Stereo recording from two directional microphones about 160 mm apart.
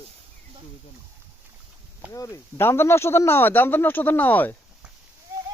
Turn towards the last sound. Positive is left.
turn(degrees=10)  # may be behind; listen again after turning